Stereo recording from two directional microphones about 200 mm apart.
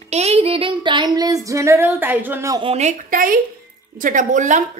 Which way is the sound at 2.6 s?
35° right (ahead or behind).